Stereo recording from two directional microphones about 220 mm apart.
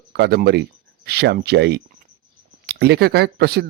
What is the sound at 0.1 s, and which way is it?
Speech, 45° right (ahead or behind).